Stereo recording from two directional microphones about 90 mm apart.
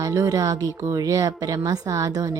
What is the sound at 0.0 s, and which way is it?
Speech, 40° right (ahead or behind).